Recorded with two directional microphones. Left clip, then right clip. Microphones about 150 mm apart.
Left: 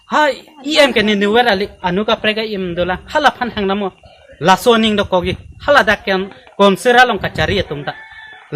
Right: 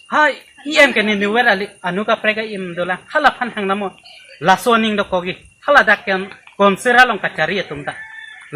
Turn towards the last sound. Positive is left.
turn(degrees=25)  # may be behind; listen again after turning